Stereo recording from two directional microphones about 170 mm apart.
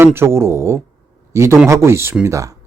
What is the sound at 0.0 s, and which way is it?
A man's voice, 15° right (ahead or behind).